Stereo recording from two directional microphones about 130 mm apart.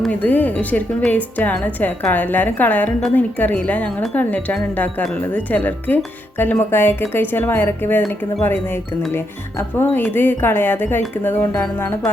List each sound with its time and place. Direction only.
0.0 s speech: 10° left (ahead or behind)
9.1 s speech: 15° left (ahead or behind)